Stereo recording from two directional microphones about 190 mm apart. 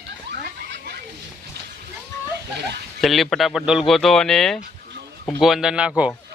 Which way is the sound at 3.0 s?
Centre (ahead or behind).